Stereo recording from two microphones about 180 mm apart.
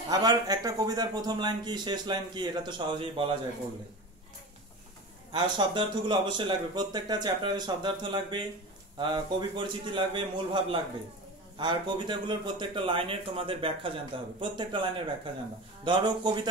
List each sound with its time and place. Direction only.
0.1 s speech: 20° right (ahead or behind)
5.3 s speech: 25° right (ahead or behind)